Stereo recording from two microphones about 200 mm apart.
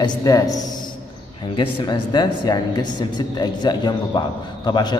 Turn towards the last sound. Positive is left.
turn(degrees=20)  # may be behind; listen again after turning